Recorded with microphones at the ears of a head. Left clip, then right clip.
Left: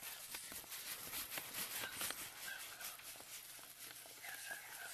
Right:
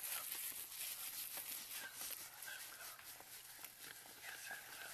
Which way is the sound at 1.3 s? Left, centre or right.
Left.